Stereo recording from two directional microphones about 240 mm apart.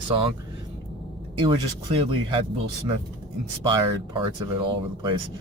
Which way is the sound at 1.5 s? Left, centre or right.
Right.